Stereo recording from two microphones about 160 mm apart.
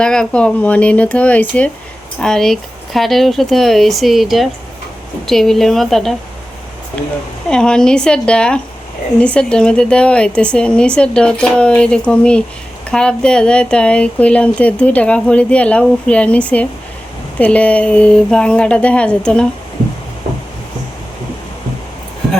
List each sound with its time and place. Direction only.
0.0 s speech: 5° left (ahead or behind)
7.4 s speech: 5° left (ahead or behind)